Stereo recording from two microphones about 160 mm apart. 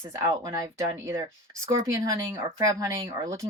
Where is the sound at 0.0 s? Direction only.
15° right (ahead or behind).